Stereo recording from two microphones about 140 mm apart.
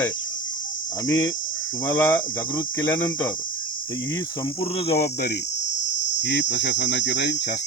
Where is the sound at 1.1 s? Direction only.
25° left (ahead or behind).